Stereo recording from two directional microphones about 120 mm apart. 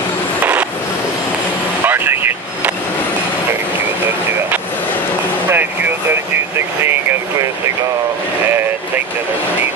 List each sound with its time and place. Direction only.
1.9 s vehicle: 15° right (ahead or behind)
5.5 s a sound: 20° right (ahead or behind)
6.8 s vehicle: 20° right (ahead or behind)